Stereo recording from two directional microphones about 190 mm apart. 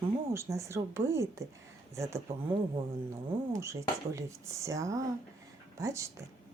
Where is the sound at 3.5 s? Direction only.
15° right (ahead or behind).